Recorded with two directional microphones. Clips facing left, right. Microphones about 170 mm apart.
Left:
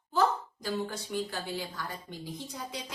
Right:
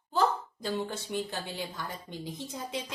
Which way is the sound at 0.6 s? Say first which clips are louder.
Right 1 dB; 25° right (ahead or behind).